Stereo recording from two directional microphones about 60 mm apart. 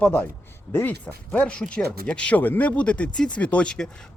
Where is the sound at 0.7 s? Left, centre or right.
Left.